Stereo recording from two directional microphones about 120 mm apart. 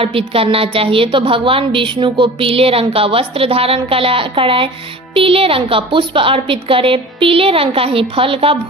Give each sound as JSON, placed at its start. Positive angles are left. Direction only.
{"t": 0.0, "sound": "a woman's voice", "side_deg": -50}